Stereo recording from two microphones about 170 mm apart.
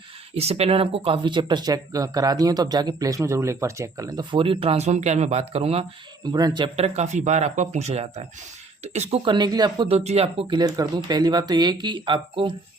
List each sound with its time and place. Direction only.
0.3 s speech: 35° right (ahead or behind)
6.3 s speech: 25° right (ahead or behind)
6.7 s speech: 40° right (ahead or behind)
10.0 s speech: 40° right (ahead or behind)
10.4 s speech: 25° right (ahead or behind)